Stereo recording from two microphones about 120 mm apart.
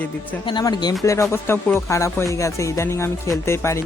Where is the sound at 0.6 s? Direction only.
35° left (ahead or behind).